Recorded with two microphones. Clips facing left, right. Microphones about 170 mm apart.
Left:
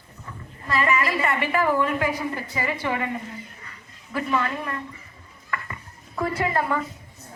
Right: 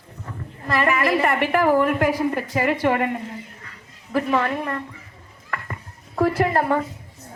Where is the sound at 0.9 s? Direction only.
55° right (ahead or behind).